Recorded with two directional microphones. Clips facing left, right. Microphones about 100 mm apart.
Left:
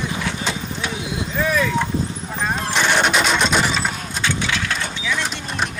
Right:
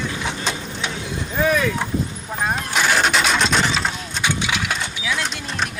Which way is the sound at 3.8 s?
Centre (ahead or behind).